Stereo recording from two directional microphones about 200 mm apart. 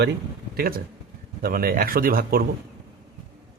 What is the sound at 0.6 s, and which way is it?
Speech, 45° right (ahead or behind).